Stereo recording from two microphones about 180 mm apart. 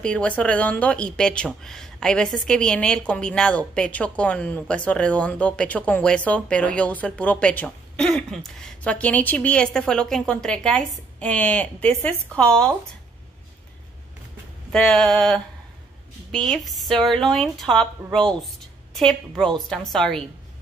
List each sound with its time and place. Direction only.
0.0 s speech: 5° left (ahead or behind)
14.7 s speech: 5° left (ahead or behind)